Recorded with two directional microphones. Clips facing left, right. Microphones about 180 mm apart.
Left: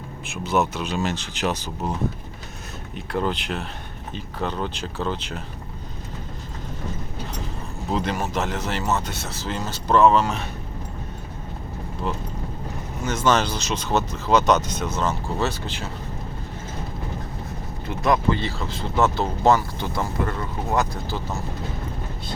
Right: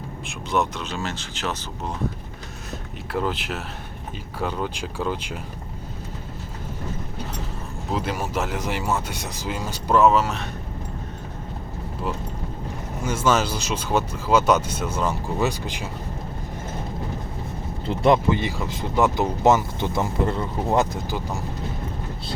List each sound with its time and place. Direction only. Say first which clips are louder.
0.3 s speech: left 2 dB; 5° left (ahead or behind)
0.9 s speech: left 6 dB; 15° left (ahead or behind)
3.1 s speech: left 1 dB; 5° right (ahead or behind)
7.9 s speech: left 1 dB; 5° right (ahead or behind)
13.1 s speech: even; 5° right (ahead or behind)
17.8 s speech: right 4 dB; 30° right (ahead or behind)
18.3 s speech: right 1 dB; 15° right (ahead or behind)